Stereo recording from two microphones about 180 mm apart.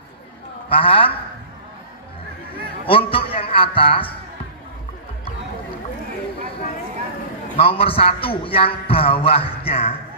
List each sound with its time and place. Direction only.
0.7 s a man's voice: 30° left (ahead or behind)
2.8 s a man's voice: 30° left (ahead or behind)
7.5 s a man's voice: 30° left (ahead or behind)